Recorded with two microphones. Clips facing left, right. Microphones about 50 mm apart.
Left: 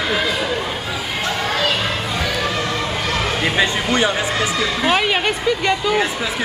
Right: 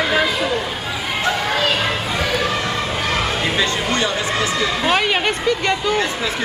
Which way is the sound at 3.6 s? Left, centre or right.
Centre.